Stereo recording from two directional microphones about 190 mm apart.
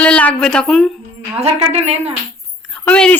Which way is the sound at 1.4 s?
35° right (ahead or behind).